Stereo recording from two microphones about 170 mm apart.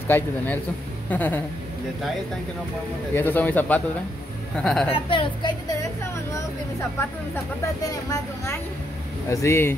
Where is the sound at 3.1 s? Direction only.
10° left (ahead or behind).